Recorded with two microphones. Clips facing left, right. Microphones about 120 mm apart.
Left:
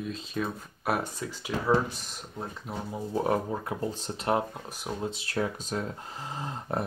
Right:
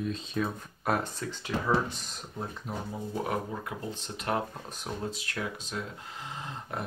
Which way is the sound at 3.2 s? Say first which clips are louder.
Left 5 dB; 35° left (ahead or behind).